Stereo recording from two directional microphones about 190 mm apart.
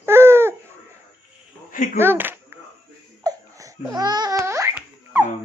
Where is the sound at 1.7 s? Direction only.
45° left (ahead or behind).